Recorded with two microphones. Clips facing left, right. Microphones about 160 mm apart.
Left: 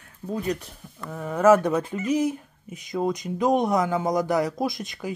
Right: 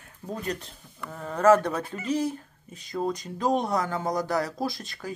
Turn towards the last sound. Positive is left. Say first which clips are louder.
# left 4 dB
turn(degrees=15)  # may be behind; listen again after turning